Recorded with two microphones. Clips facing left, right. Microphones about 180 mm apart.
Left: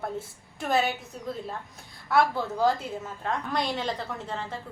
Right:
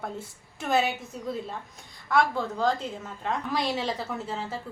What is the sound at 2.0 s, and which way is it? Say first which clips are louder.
A woman's voice: left 1 dB; 5° left (ahead or behind).